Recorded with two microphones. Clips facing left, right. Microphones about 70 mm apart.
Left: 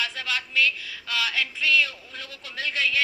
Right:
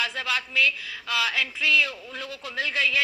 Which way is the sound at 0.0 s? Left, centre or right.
Right.